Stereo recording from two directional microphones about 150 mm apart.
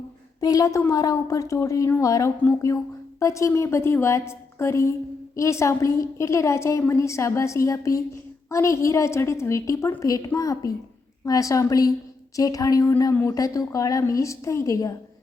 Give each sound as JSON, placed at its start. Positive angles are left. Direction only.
{"t": 0.3, "sound": "a woman's voice", "side_deg": 25}